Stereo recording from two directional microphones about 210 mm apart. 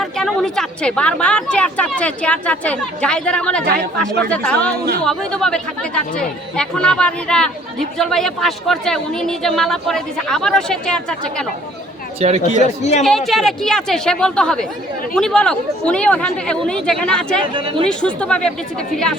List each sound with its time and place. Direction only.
0.0 s speech: centre (ahead or behind)
12.2 s speech: 30° right (ahead or behind)
12.8 s speech: 30° left (ahead or behind)
13.1 s speech: centre (ahead or behind)
17.5 s speech: 25° right (ahead or behind)
17.8 s speech: 5° left (ahead or behind)